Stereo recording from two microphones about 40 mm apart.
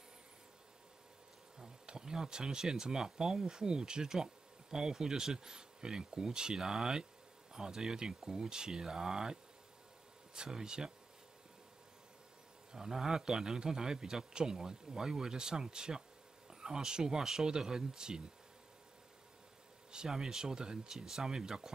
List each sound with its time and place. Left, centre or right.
1.6 s speech: centre
12.7 s speech: centre
19.9 s speech: centre